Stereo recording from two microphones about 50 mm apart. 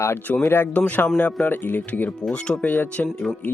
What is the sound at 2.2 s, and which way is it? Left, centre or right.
Speech, centre.